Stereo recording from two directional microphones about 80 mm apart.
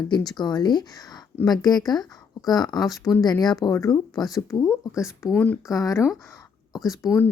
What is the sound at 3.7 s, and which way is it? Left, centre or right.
Speech, left.